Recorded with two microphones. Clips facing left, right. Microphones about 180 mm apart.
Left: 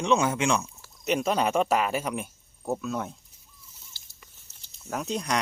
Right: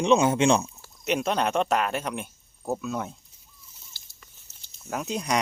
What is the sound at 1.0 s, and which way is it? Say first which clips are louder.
Speech: even; centre (ahead or behind).